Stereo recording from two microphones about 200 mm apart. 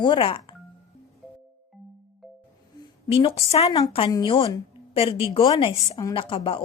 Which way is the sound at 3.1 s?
30° left (ahead or behind).